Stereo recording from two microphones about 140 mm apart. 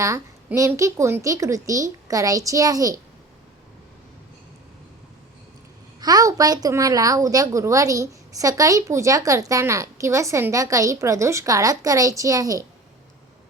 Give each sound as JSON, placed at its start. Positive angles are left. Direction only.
{"t": 0.0, "sound": "a woman's voice", "side_deg": -20}
{"t": 6.0, "sound": "a woman's voice", "side_deg": -25}